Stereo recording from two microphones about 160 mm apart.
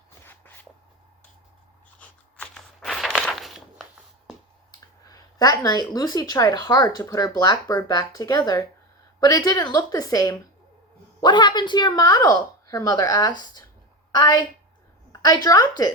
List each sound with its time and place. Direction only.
0.3 s shuffle: 10° left (ahead or behind)
2.0 s a sound: 5° left (ahead or behind)
5.0 s speech: 25° left (ahead or behind)